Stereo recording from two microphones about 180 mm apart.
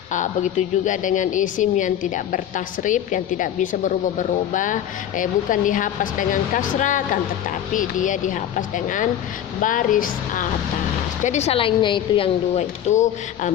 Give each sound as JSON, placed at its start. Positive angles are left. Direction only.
{"t": 0.1, "sound": "a woman's voice", "side_deg": 45}